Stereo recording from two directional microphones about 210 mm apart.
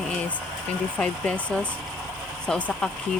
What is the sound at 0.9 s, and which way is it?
Speech, 5° left (ahead or behind).